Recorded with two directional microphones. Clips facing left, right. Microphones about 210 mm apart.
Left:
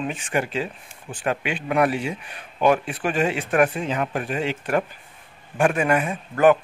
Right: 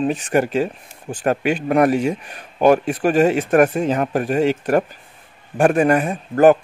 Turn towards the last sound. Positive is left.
turn(degrees=-40)  # may be behind; listen again after turning